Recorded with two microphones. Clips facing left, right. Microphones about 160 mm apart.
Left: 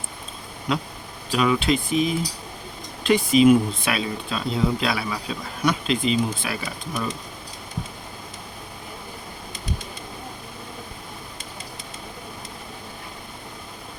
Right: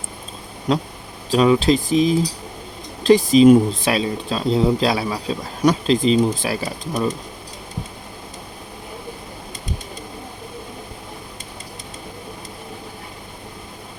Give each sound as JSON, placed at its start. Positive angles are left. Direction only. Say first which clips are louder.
{"t": 0.7, "sound": "speech", "louder": "right 5 dB", "side_deg": -40}